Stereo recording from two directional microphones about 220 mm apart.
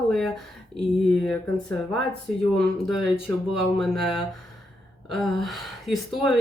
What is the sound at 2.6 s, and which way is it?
Speech, centre (ahead or behind).